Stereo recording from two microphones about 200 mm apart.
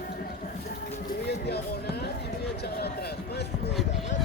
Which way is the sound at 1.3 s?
55° left (ahead or behind).